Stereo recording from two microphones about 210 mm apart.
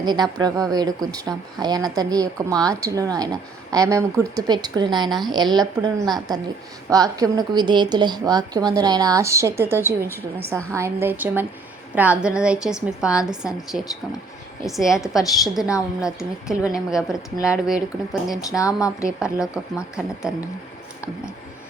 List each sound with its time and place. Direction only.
0.0 s a woman's voice: 20° right (ahead or behind); by 18.3 s 5° right (ahead or behind)
18.3 s a woman's voice: 15° left (ahead or behind)
19.0 s speech: 5° right (ahead or behind)